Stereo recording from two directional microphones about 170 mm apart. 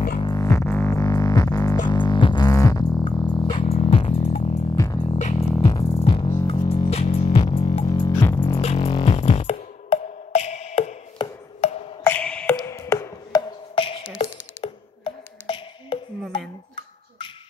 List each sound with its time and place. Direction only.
0.2 s music: 20° left (ahead or behind)
4.7 s music: 20° left (ahead or behind)
5.9 s music: 35° left (ahead or behind)
6.9 s music: 40° left (ahead or behind)
8.1 s music: 15° left (ahead or behind)
8.4 s music: 35° left (ahead or behind)
12.0 s music: 10° left (ahead or behind)
13.7 s a sound: 30° left (ahead or behind)
14.1 s music: 30° left (ahead or behind)